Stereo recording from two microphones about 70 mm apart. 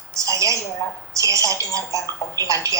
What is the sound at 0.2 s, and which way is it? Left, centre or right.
A woman's voice, right.